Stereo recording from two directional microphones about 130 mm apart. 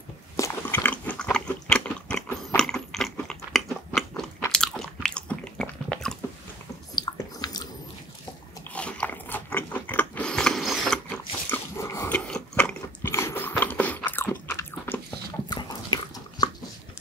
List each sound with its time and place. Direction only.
0.4 s biting: 15° left (ahead or behind)
7.0 s a sound: 30° left (ahead or behind)
8.7 s biting: 10° left (ahead or behind)
11.5 s dog: 20° left (ahead or behind)
12.1 s biting: 5° left (ahead or behind)
15.5 s dog: 35° left (ahead or behind)